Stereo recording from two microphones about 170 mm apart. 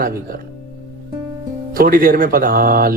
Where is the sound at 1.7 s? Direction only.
60° right (ahead or behind).